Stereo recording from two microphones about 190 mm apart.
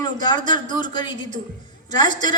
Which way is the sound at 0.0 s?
20° left (ahead or behind).